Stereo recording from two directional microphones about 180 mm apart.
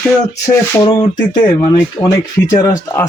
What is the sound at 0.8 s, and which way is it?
Speech, 30° left (ahead or behind).